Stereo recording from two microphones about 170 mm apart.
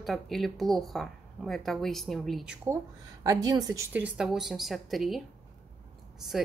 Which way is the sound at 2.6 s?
20° right (ahead or behind).